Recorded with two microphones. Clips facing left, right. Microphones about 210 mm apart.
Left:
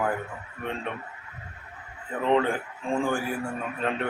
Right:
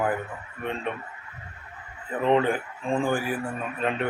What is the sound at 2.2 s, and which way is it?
Speech, 15° right (ahead or behind).